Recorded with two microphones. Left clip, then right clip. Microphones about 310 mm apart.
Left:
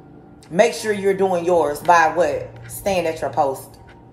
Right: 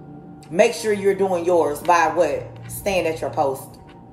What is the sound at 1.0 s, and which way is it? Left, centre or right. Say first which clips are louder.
Speech: left 3 dB; left.